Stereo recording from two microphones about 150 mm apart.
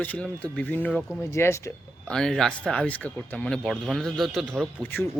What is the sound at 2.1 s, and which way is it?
A man's voice, 5° left (ahead or behind).